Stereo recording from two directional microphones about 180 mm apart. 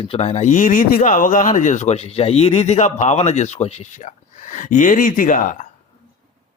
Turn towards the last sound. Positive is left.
turn(degrees=45)  # may be behind; listen again after turning